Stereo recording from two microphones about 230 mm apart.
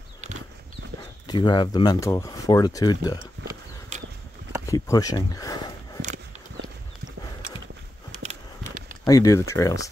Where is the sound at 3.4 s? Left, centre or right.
Right.